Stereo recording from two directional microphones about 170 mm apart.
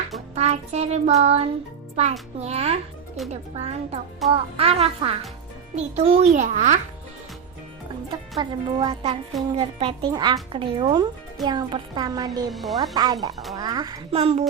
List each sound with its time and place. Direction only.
0.3 s a child's voice: 40° right (ahead or behind)
3.2 s speech: centre (ahead or behind)
3.6 s speech: 40° right (ahead or behind)
4.2 s speech: centre (ahead or behind)
4.5 s a child's voice: 35° right (ahead or behind)
8.1 s speech: 30° right (ahead or behind)
12.5 s speech: centre (ahead or behind)
12.9 s speech: 25° right (ahead or behind)
14.1 s speech: 35° right (ahead or behind)